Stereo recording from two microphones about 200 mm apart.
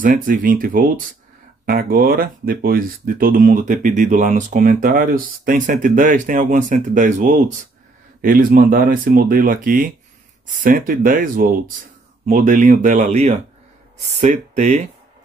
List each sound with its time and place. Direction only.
0.0 s speech: 45° right (ahead or behind)